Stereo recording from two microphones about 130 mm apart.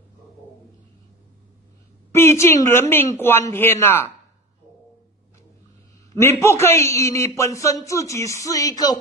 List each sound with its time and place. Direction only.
2.1 s a man's voice: 20° left (ahead or behind)
6.1 s a man's voice: 20° left (ahead or behind)